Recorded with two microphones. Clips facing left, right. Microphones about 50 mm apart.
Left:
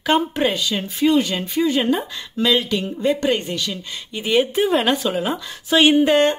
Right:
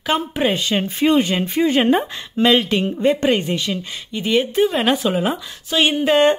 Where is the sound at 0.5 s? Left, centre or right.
Right.